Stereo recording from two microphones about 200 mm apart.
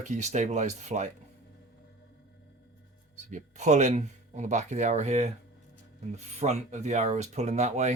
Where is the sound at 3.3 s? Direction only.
35° right (ahead or behind).